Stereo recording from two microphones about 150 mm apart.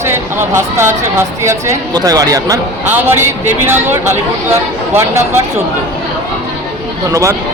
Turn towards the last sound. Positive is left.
turn(degrees=-20)  # may be behind; listen again after turning